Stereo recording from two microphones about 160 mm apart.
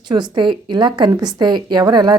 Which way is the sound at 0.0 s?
30° right (ahead or behind).